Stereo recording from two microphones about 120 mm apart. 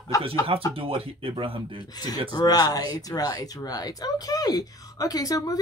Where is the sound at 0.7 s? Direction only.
50° right (ahead or behind).